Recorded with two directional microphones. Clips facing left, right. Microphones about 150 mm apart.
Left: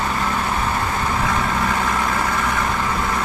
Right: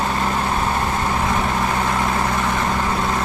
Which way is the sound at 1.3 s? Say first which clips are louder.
Right 1 dB; 20° right (ahead or behind).